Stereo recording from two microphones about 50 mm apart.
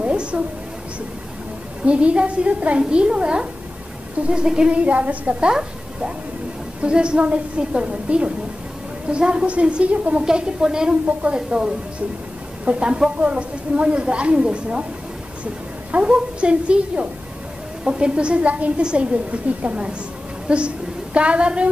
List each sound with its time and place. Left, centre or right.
0.0 s a sound: right
1.9 s a woman's voice: right
5.5 s a woman's voice: centre
15.9 s a woman's voice: right